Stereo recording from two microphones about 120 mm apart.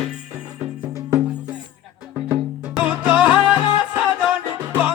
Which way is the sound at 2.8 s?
10° right (ahead or behind).